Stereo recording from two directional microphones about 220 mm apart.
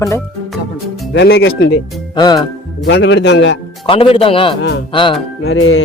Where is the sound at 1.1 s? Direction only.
50° left (ahead or behind).